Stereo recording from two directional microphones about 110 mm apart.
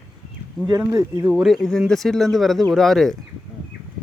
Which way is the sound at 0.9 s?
35° right (ahead or behind).